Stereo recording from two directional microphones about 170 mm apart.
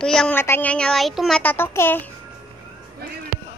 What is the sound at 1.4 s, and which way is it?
Speech, 10° left (ahead or behind).